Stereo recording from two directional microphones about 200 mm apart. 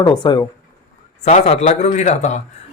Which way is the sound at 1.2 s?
35° left (ahead or behind).